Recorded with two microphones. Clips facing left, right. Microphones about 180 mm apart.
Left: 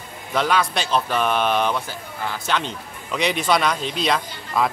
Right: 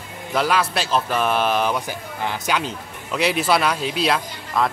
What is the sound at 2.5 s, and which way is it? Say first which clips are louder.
Speech: right 1 dB; 5° right (ahead or behind).